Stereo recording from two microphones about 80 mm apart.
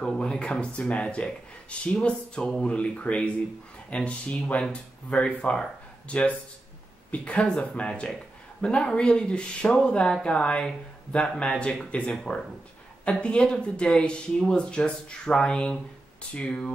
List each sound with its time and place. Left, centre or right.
0.0 s speech: centre